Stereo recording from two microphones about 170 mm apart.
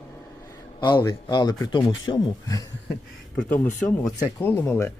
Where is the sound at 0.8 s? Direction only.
25° left (ahead or behind).